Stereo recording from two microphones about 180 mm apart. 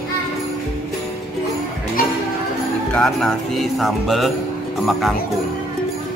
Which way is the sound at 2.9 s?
5° left (ahead or behind).